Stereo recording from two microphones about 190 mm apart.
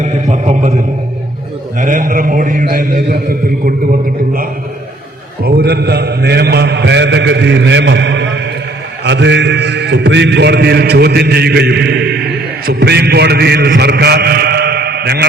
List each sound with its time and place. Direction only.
0.0 s a sound: 40° right (ahead or behind)
1.8 s a man's voice: 45° right (ahead or behind)
5.4 s mantra: 55° right (ahead or behind)
9.0 s a man's voice: 70° right (ahead or behind)